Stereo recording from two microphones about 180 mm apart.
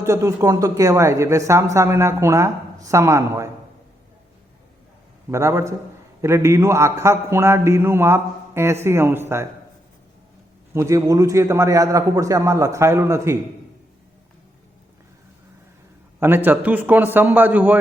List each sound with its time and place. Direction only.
0.0 s a man's voice: 15° right (ahead or behind)
5.3 s a man's voice: 15° right (ahead or behind)
10.8 s a man's voice: 15° right (ahead or behind)
16.2 s a man's voice: 10° right (ahead or behind)